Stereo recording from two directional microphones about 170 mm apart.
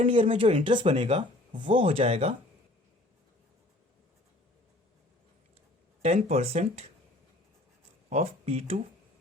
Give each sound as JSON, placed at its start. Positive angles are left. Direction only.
{"t": 0.0, "sound": "speech", "side_deg": -30}
{"t": 6.0, "sound": "speech", "side_deg": -40}
{"t": 8.1, "sound": "speech", "side_deg": -35}